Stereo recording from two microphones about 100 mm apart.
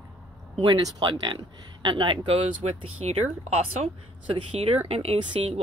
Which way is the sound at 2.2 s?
85° right.